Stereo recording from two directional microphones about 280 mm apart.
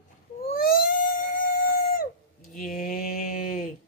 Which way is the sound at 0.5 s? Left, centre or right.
Left.